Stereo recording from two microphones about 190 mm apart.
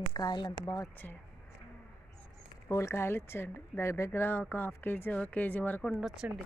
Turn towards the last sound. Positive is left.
turn(degrees=0)  # may be behind; listen again after turning